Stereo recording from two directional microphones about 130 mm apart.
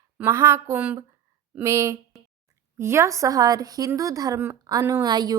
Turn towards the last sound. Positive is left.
turn(degrees=-30)  # may be behind; listen again after turning